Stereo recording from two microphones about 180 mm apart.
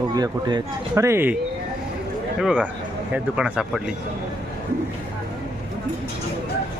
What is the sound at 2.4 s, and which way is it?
Speech, 5° right (ahead or behind).